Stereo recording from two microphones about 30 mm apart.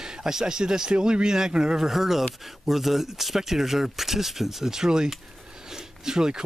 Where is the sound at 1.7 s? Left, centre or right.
Centre.